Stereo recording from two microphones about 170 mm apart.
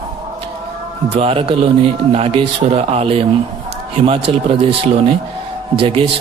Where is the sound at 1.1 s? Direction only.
35° right (ahead or behind).